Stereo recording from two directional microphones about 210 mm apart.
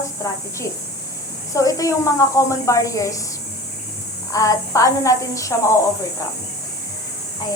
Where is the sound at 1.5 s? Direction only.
15° left (ahead or behind).